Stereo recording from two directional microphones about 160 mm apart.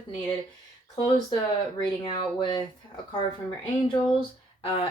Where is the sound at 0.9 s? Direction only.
25° left (ahead or behind).